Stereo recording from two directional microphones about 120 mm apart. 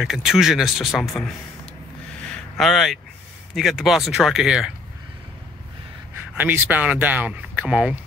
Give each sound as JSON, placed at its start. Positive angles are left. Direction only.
{"t": 0.0, "sound": "speech", "side_deg": -5}
{"t": 2.2, "sound": "a sound", "side_deg": 5}
{"t": 3.5, "sound": "speech", "side_deg": 0}
{"t": 6.3, "sound": "speech", "side_deg": -15}